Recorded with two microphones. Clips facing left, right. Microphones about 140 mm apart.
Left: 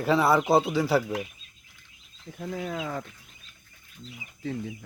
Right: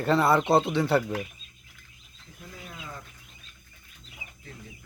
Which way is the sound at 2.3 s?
90° left.